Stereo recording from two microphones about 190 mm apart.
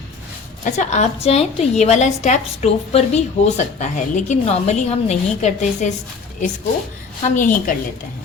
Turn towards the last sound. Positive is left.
turn(degrees=45)  # may be behind; listen again after turning